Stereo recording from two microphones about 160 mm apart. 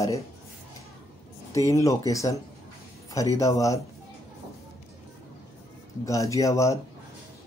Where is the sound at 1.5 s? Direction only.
20° left (ahead or behind).